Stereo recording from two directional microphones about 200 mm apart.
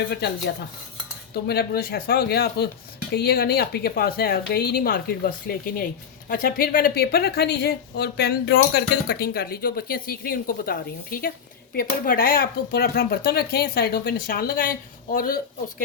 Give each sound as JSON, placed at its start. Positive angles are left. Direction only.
{"t": 1.3, "sound": "a woman's voice", "side_deg": 55}